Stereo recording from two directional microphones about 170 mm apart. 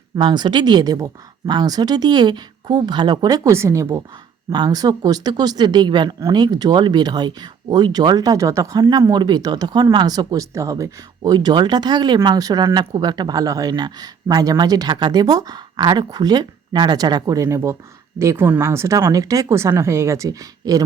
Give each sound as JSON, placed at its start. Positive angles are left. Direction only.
{"t": 0.2, "sound": "speech", "side_deg": -25}